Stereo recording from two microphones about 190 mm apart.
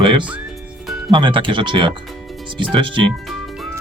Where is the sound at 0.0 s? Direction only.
25° right (ahead or behind).